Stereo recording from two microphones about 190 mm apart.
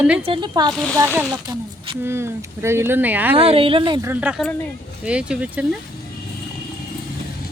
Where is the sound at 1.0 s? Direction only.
10° right (ahead or behind).